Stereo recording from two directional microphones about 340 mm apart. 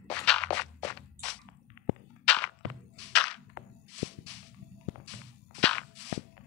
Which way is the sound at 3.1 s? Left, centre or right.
Centre.